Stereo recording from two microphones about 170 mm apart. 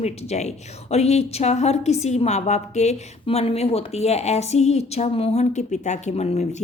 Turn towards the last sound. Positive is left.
turn(degrees=40)  # may be behind; listen again after turning